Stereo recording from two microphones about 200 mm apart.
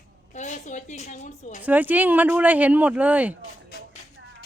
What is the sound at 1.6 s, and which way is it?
Speech, 10° right (ahead or behind).